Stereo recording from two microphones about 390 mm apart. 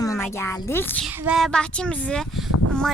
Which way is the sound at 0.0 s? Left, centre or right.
Centre.